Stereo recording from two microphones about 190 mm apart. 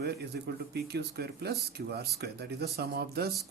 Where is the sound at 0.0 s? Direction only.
60° right (ahead or behind).